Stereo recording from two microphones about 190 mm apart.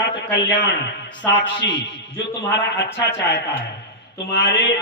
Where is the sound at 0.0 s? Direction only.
70° left (ahead or behind).